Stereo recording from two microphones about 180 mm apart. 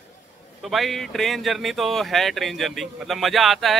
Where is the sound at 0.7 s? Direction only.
Centre (ahead or behind).